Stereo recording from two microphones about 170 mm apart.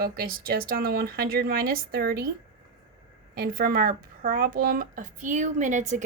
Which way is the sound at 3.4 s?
60° right (ahead or behind).